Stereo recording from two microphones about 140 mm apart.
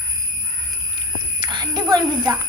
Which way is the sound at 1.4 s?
30° right (ahead or behind).